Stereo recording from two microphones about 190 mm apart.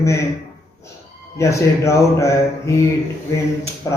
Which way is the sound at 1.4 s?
15° left (ahead or behind).